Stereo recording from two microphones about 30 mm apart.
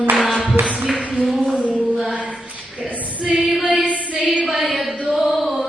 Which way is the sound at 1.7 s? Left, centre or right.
Right.